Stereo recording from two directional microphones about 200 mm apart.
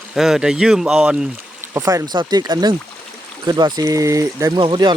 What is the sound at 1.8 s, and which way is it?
Speech, 15° right (ahead or behind).